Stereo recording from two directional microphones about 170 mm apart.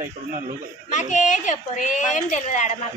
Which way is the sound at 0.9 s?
45° left (ahead or behind).